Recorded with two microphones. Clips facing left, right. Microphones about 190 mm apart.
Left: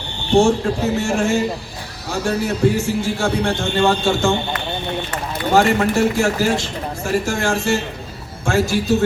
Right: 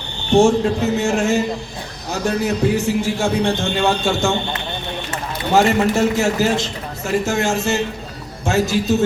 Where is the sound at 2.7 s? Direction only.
15° right (ahead or behind).